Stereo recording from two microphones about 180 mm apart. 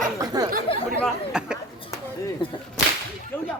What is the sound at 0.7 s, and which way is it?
Speech, 30° left (ahead or behind).